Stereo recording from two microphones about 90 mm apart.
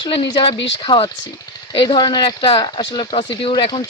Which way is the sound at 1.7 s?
65° left (ahead or behind).